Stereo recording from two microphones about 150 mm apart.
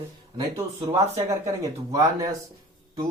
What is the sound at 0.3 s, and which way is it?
Speech, 25° right (ahead or behind).